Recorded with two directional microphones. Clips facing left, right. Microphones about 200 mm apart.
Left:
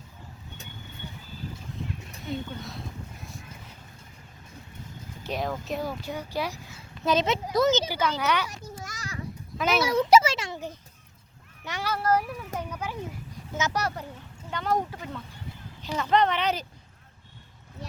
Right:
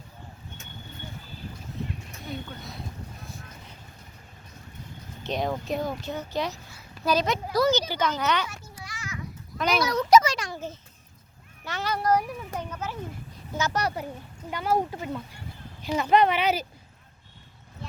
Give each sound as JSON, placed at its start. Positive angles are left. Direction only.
{"t": 2.3, "sound": "a sound", "side_deg": 0}
{"t": 5.2, "sound": "speech", "side_deg": 5}
{"t": 6.7, "sound": "a sound", "side_deg": 25}
{"t": 7.9, "sound": "speech", "side_deg": 10}
{"t": 8.8, "sound": "children playing", "side_deg": 40}
{"t": 9.6, "sound": "speech", "side_deg": 5}
{"t": 9.8, "sound": "a child's voice", "side_deg": 30}
{"t": 10.2, "sound": "a sound", "side_deg": 25}
{"t": 11.6, "sound": "speech", "side_deg": 10}
{"t": 14.5, "sound": "speech", "side_deg": -10}